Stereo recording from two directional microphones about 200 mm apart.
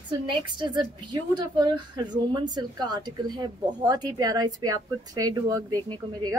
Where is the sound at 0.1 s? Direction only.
20° right (ahead or behind).